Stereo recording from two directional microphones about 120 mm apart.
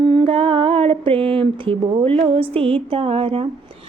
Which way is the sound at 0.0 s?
45° right (ahead or behind).